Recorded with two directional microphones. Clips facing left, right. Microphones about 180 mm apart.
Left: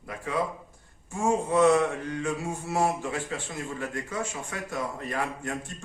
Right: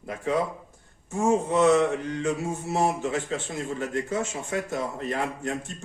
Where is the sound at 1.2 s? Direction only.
20° right (ahead or behind).